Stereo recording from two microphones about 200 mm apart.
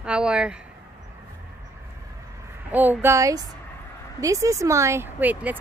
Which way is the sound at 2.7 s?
10° right (ahead or behind).